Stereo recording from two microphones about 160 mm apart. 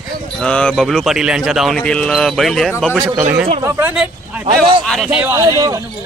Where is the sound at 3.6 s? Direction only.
15° right (ahead or behind).